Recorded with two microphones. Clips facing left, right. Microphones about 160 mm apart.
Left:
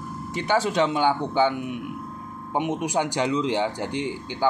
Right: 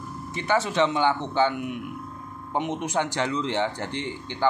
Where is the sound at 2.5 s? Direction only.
10° left (ahead or behind).